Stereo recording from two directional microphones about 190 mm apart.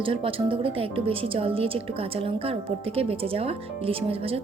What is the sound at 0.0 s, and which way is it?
Speech, 30° right (ahead or behind).